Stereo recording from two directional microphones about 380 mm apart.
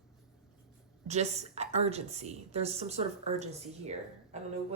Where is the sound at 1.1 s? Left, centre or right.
Centre.